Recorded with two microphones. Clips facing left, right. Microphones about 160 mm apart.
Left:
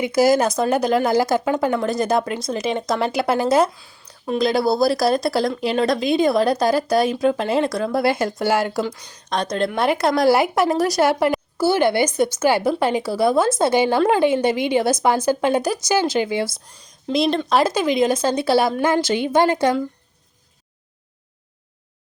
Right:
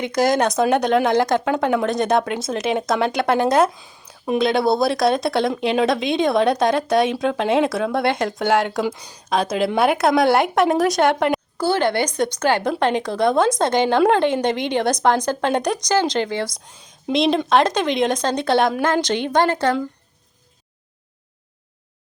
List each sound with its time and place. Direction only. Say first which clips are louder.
0.0 s a woman's voice: left 2 dB; 5° left (ahead or behind)
3.8 s a sound: right 3 dB; 20° right (ahead or behind)
4.4 s a woman's voice: even; centre (ahead or behind)
8.8 s a woman's voice: right 1 dB; 15° right (ahead or behind); by 19.8 s 10° left (ahead or behind)